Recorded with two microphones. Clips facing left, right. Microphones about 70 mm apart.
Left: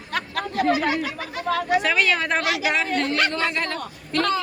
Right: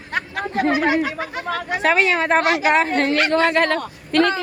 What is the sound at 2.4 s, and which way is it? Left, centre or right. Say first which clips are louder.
Speech: right 6 dB; right.